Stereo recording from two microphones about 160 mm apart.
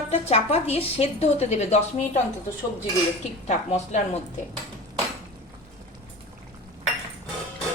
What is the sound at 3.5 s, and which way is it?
Speech, 45° left (ahead or behind).